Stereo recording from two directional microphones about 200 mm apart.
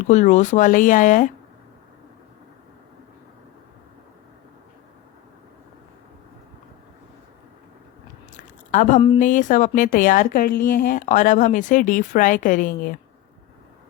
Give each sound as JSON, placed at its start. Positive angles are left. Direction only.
{"t": 0.1, "sound": "a woman's voice", "side_deg": 35}
{"t": 8.4, "sound": "a woman's voice", "side_deg": 40}